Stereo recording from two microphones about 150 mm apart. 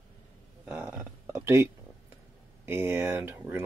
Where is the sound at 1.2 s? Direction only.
15° right (ahead or behind).